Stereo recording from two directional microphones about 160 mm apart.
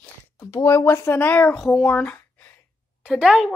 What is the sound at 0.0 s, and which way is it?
Speech, 15° left (ahead or behind).